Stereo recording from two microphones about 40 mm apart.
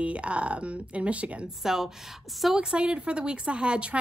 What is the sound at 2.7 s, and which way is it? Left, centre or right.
Speech, right.